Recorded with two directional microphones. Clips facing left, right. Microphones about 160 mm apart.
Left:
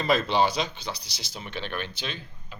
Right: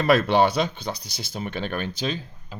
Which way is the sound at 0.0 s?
65° right (ahead or behind).